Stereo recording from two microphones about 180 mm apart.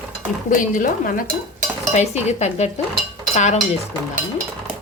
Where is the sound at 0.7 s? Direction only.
50° left (ahead or behind).